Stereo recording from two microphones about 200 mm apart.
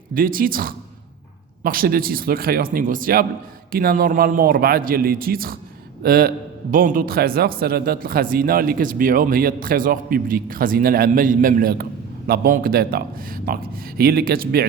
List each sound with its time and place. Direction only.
0.1 s a man's voice: 45° right (ahead or behind)